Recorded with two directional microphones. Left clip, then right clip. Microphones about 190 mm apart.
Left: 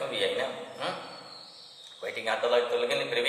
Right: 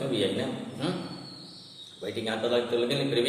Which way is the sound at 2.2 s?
10° right (ahead or behind).